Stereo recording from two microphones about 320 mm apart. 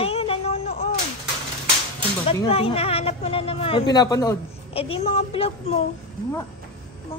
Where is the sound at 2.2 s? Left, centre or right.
Centre.